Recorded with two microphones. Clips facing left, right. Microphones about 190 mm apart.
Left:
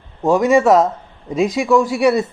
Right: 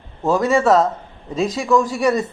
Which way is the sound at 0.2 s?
15° left (ahead or behind).